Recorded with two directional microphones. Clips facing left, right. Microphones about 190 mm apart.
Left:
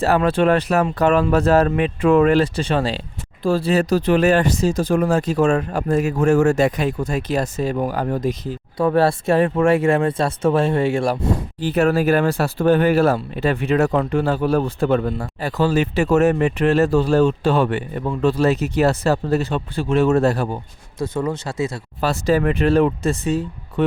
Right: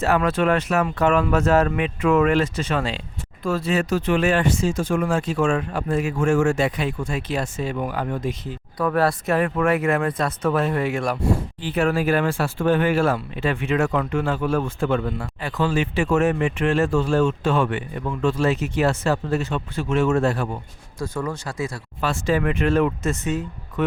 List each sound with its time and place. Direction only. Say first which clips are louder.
0.0 s speech: left 3 dB; 35° left (ahead or behind)
11.6 s speech: left 5 dB; 40° left (ahead or behind)
21.0 s speech: left 4 dB; 20° left (ahead or behind)
22.0 s speech: left 4 dB; 35° left (ahead or behind)